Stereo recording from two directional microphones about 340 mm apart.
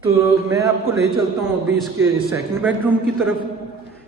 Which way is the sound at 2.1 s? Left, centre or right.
Centre.